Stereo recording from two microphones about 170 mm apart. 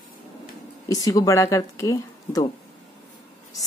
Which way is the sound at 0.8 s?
20° left (ahead or behind).